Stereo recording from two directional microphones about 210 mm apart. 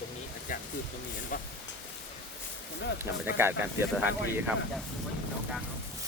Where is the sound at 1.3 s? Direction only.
40° left (ahead or behind).